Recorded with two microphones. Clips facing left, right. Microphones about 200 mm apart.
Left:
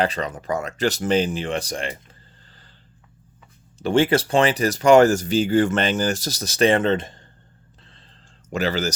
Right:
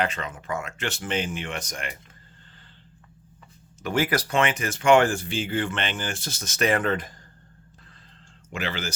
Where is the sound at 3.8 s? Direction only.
30° left (ahead or behind).